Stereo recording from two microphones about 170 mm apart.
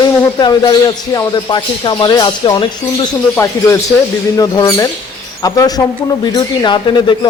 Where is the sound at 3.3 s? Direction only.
15° left (ahead or behind).